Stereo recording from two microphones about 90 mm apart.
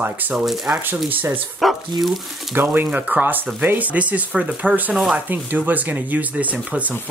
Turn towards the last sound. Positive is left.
turn(degrees=-15)  # may be behind; listen again after turning